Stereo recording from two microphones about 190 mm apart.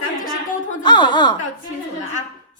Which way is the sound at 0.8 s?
25° left (ahead or behind).